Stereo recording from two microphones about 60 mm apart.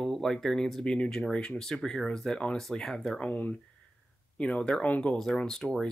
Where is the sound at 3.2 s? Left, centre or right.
Left.